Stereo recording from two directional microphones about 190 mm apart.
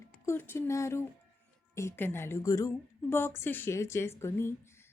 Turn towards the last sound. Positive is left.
turn(degrees=15)  # may be behind; listen again after turning